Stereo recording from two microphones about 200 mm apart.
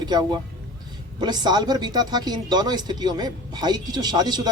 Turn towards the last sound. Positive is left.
turn(degrees=-20)  # may be behind; listen again after turning